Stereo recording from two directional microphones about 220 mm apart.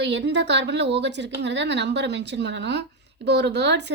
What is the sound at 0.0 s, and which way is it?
Speech, 50° right (ahead or behind).